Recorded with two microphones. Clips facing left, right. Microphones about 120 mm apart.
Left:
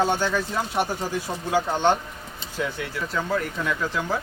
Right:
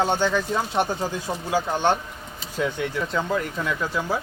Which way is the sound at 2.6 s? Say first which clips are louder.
Right 3 dB; 20° right (ahead or behind).